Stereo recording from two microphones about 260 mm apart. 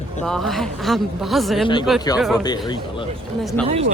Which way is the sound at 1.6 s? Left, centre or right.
Centre.